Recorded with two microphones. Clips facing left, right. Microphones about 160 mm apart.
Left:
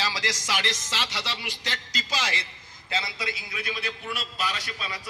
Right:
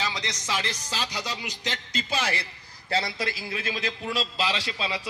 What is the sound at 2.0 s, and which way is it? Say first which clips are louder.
Speech: right 2 dB; 30° right (ahead or behind).